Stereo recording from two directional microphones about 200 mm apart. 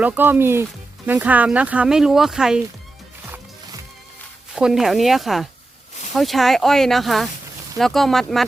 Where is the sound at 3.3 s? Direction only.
15° right (ahead or behind).